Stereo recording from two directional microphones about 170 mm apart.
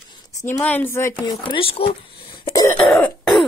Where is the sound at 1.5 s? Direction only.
30° left (ahead or behind).